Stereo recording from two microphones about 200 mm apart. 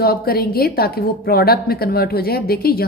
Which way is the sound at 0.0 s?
50° left (ahead or behind).